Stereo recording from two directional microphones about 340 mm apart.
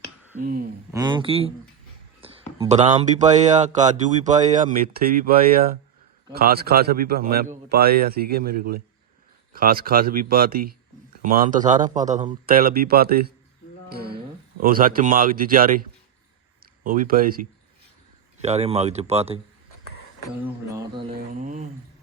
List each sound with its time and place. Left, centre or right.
0.3 s speech: right
0.9 s speech: centre
2.2 s a sound: centre
2.6 s speech: centre
13.9 s a sound: right
14.6 s speech: right
16.8 s speech: right
20.4 s speech: centre